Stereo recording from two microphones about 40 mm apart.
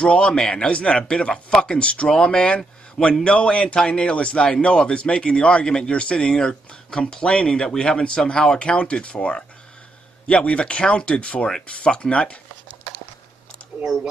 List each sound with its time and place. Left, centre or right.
0.0 s a man's voice: left